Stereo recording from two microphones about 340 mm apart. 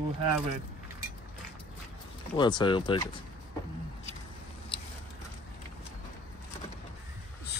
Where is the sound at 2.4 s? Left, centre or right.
Centre.